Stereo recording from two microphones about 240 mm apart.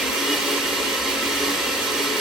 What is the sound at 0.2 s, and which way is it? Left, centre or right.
Vacuum cleaner, centre.